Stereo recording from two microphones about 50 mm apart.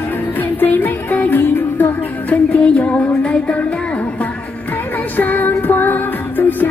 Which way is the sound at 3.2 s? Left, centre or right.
Left.